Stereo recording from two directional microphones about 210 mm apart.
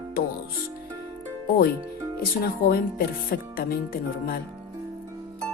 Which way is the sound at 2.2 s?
45° left (ahead or behind).